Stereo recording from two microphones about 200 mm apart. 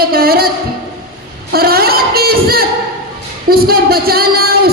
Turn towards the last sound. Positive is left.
turn(degrees=-50)  # may be behind; listen again after turning